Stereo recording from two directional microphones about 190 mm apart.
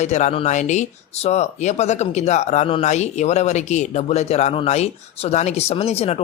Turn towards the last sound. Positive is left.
turn(degrees=35)  # may be behind; listen again after turning